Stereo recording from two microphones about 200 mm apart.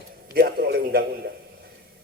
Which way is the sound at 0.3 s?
50° right (ahead or behind).